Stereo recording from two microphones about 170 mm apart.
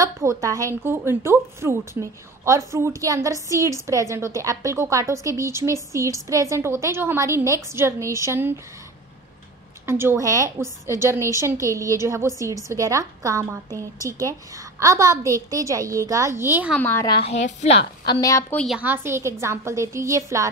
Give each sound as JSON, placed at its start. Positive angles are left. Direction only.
{"t": 0.0, "sound": "a woman's voice", "side_deg": -20}
{"t": 9.8, "sound": "a woman's voice", "side_deg": -15}
{"t": 16.7, "sound": "speech", "side_deg": 10}
{"t": 17.0, "sound": "a woman's voice", "side_deg": 30}
{"t": 18.0, "sound": "a woman's voice", "side_deg": 20}
{"t": 18.8, "sound": "a woman's voice", "side_deg": -10}